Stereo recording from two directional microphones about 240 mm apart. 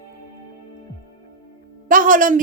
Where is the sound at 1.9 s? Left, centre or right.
Right.